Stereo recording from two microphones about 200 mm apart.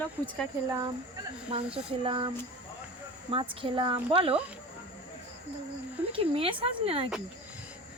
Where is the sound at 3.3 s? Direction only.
25° right (ahead or behind).